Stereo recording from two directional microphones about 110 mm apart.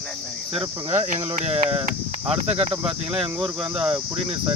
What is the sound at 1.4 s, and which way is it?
Speech, 70° right (ahead or behind).